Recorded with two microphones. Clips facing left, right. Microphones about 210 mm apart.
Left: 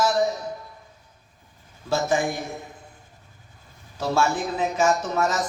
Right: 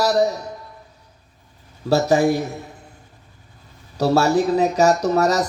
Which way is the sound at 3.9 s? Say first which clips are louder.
Right 7 dB; 40° right (ahead or behind).